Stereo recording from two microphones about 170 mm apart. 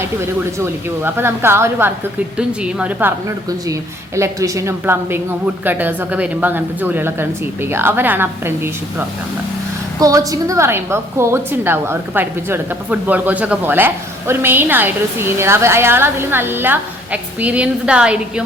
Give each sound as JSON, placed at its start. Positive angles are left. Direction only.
{"t": 0.6, "sound": "a woman's voice", "side_deg": -15}
{"t": 3.2, "sound": "a woman's voice", "side_deg": -20}